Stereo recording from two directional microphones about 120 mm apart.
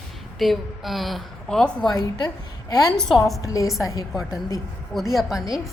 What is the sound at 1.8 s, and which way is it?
A woman's voice, 35° left (ahead or behind).